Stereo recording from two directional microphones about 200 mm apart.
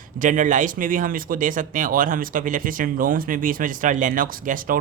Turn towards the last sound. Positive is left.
turn(degrees=-45)  # may be behind; listen again after turning